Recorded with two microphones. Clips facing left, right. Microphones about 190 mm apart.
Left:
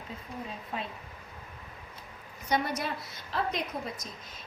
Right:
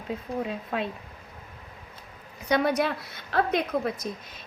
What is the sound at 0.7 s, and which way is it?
Speech, 75° right (ahead or behind).